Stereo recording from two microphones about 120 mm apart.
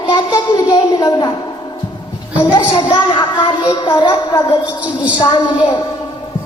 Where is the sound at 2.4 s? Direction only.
35° left (ahead or behind).